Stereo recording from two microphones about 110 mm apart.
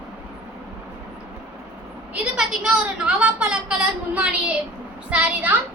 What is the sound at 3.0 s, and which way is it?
A woman's voice, 10° right (ahead or behind).